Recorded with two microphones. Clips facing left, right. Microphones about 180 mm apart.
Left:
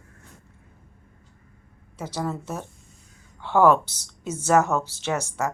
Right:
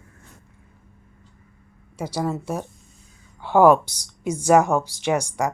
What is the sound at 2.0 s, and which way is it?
Speech, 10° right (ahead or behind).